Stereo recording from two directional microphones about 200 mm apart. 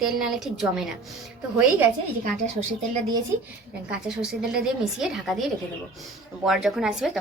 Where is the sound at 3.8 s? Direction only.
5° right (ahead or behind).